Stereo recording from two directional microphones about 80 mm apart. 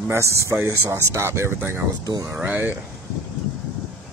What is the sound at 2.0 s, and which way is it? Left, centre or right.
Speech, right.